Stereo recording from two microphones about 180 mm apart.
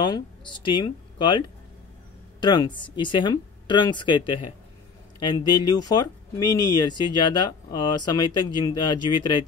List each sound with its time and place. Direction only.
0.0 s speech: 25° left (ahead or behind)
2.4 s speech: 25° left (ahead or behind)